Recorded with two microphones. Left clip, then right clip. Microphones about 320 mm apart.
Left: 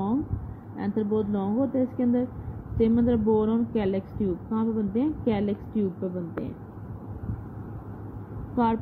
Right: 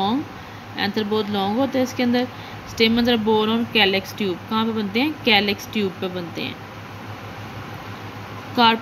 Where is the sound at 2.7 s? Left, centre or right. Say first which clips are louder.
Right 6 dB; centre.